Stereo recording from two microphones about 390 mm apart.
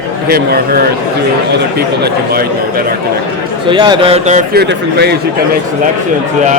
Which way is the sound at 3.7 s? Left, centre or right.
Centre.